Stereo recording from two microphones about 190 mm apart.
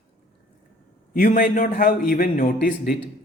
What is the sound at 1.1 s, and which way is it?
A man's voice, 45° left (ahead or behind).